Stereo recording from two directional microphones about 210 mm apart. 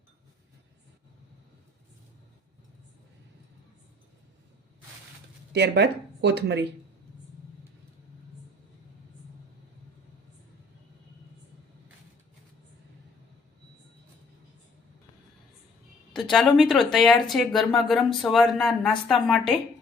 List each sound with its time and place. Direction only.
5.5 s speech: 55° right (ahead or behind)
16.3 s speech: centre (ahead or behind)